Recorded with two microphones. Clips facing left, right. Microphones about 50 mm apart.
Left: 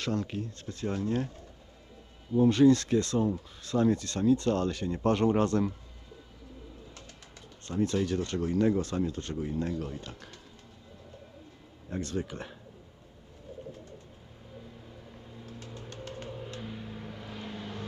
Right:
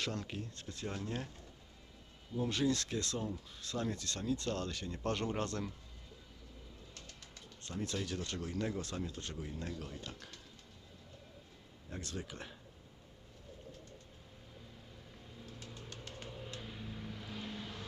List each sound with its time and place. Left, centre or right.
0.0 s speech: centre
2.4 s speech: centre
7.6 s speech: centre
9.3 s speech: left
9.6 s speech: centre
11.9 s speech: centre
15.4 s bird: centre
16.6 s vehicle: centre